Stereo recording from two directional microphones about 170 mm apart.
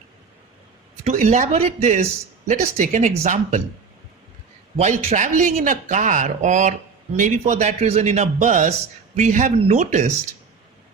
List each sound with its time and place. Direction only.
1.0 s speech: 50° right (ahead or behind)
4.8 s speech: 45° right (ahead or behind)